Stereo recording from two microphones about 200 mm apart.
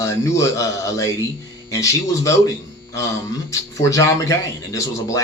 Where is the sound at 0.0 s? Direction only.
15° left (ahead or behind).